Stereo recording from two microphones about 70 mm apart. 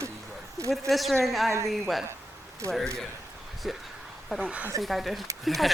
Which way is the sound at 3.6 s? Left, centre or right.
Centre.